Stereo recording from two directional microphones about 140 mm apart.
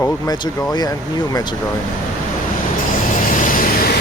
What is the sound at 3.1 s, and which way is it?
Vehicle, 75° left (ahead or behind).